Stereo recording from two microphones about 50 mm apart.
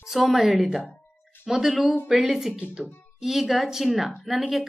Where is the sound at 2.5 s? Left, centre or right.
Right.